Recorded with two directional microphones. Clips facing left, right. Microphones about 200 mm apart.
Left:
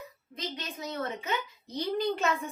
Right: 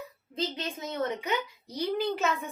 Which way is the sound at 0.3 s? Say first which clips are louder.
Right 5 dB; 30° right (ahead or behind).